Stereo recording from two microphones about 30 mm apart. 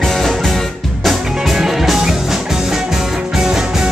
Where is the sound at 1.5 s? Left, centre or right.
Centre.